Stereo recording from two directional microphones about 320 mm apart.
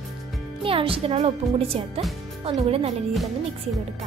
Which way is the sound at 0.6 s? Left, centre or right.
Centre.